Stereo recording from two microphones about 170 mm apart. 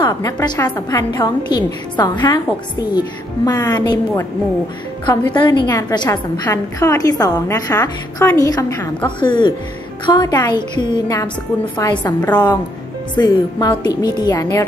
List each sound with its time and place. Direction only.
0.2 s a woman's voice: 20° left (ahead or behind)